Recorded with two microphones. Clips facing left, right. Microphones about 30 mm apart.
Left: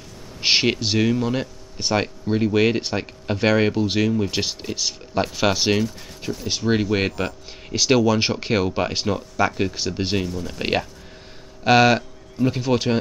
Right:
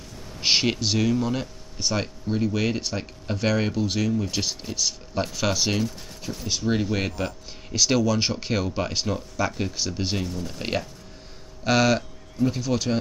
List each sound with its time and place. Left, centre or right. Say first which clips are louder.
0.4 s speech: left 3 dB; centre
1.8 s speech: left 5 dB; left